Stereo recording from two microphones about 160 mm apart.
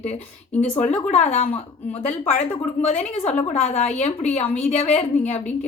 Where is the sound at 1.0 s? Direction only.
45° left (ahead or behind).